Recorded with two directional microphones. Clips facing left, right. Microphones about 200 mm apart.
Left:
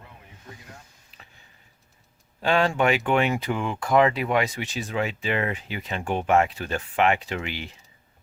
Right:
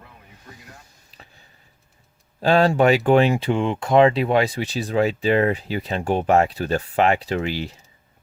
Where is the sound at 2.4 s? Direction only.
35° right (ahead or behind).